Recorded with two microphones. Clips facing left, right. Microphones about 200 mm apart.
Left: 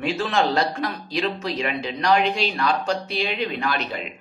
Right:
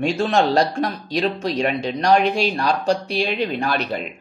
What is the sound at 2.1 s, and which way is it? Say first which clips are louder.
Speech: right 3 dB; 45° right (ahead or behind).